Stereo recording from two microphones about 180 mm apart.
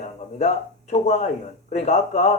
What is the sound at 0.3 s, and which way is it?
Speech, 40° left (ahead or behind).